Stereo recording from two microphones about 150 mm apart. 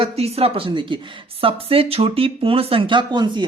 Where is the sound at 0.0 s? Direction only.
40° right (ahead or behind).